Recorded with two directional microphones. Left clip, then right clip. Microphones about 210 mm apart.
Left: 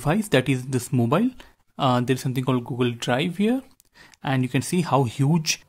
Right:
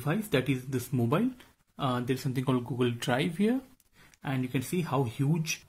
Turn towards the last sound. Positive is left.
turn(degrees=35)  # may be behind; listen again after turning